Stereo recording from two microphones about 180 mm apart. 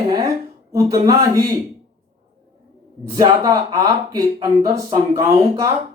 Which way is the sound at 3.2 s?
20° right (ahead or behind).